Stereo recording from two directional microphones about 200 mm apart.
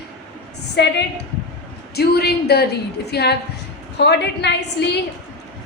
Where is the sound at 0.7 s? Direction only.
60° left (ahead or behind).